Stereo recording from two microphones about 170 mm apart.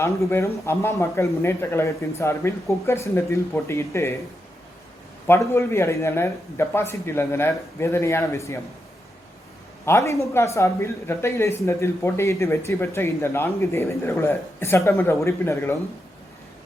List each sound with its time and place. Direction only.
0.0 s speech: 15° left (ahead or behind)
5.2 s speech: 15° left (ahead or behind)
9.8 s speech: 15° left (ahead or behind)